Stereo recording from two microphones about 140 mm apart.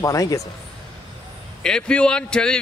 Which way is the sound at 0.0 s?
25° left (ahead or behind).